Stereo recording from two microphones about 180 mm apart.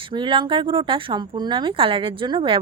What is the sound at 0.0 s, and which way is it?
Speech, 25° right (ahead or behind).